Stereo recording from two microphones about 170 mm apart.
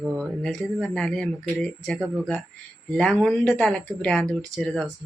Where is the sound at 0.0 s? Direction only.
Centre (ahead or behind).